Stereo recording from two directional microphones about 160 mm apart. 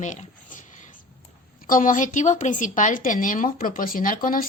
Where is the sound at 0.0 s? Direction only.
50° left (ahead or behind).